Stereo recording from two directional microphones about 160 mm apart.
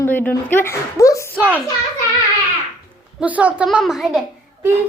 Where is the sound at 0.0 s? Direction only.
10° left (ahead or behind).